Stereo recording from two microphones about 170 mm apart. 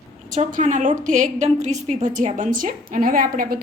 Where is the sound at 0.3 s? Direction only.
45° right (ahead or behind).